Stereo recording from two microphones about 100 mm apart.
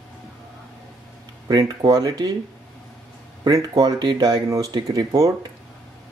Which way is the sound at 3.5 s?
35° right (ahead or behind).